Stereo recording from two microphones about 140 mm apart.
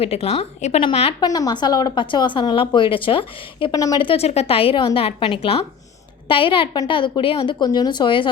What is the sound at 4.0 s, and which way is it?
A woman's voice, 40° left (ahead or behind).